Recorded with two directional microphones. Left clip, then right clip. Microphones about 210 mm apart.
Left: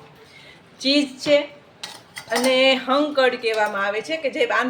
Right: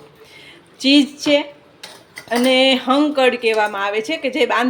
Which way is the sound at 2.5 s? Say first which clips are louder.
Right 3 dB; 30° right (ahead or behind).